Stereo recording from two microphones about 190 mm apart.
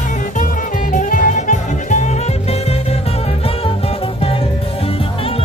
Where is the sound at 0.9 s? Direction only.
45° left (ahead or behind).